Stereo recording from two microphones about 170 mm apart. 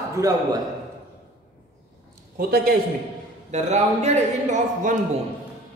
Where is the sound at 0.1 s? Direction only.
20° right (ahead or behind).